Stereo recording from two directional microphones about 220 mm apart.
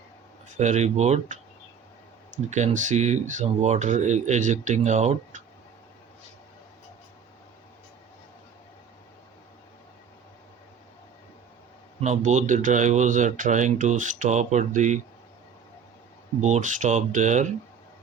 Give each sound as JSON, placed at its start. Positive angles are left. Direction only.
{"t": 0.4, "sound": "speech", "side_deg": -35}
{"t": 11.9, "sound": "speech", "side_deg": -30}
{"t": 16.4, "sound": "speech", "side_deg": -35}